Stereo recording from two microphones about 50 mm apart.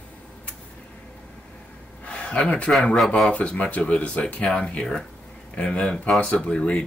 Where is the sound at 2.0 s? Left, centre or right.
Left.